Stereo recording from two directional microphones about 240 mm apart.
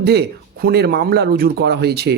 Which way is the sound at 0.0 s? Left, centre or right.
Right.